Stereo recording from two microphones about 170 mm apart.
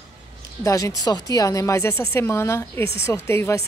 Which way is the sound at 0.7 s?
20° left (ahead or behind).